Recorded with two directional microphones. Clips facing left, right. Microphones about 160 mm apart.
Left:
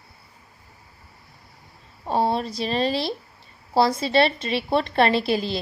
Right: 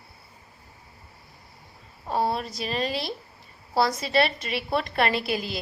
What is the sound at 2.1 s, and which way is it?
A woman's voice, 25° left (ahead or behind).